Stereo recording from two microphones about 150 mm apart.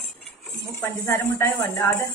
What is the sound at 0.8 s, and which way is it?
Speech, 15° left (ahead or behind).